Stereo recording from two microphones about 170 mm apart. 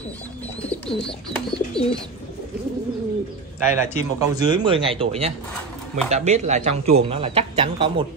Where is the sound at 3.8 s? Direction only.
15° right (ahead or behind); by 8.0 s 35° right (ahead or behind).